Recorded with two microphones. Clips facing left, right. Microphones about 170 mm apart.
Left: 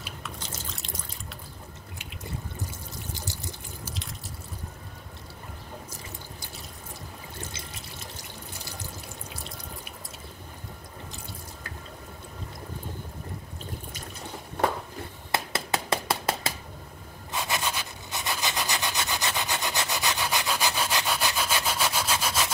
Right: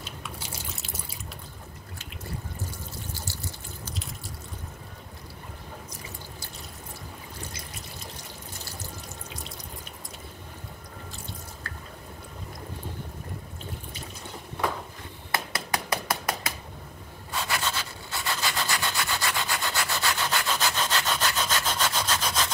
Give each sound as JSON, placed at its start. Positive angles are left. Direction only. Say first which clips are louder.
{"t": 0.4, "sound": "drip", "louder": "even", "side_deg": -5}
{"t": 15.3, "sound": "a sound", "louder": "left 1 dB", "side_deg": 25}
{"t": 17.3, "sound": "rub", "louder": "even", "side_deg": 20}